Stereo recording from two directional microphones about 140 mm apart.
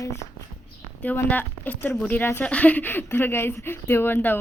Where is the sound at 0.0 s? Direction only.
20° left (ahead or behind).